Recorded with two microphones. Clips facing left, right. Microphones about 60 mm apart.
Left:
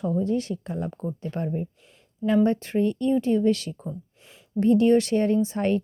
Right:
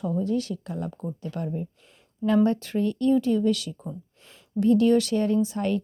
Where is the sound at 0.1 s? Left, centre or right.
Left.